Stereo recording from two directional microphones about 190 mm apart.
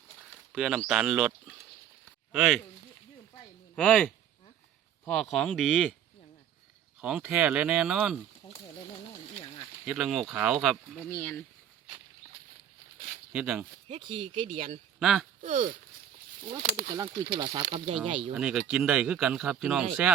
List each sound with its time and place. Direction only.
0.5 s speech: centre (ahead or behind)
3.8 s speech: 5° left (ahead or behind)
7.0 s speech: 5° right (ahead or behind)
9.8 s speech: 5° right (ahead or behind)
11.1 s speech: 10° left (ahead or behind)
13.3 s speech: 5° right (ahead or behind)
13.8 s speech: 30° right (ahead or behind)
14.9 s speech: centre (ahead or behind)
15.4 s speech: 45° right (ahead or behind)
17.3 s speech: 25° right (ahead or behind)
18.3 s speech: 5° right (ahead or behind)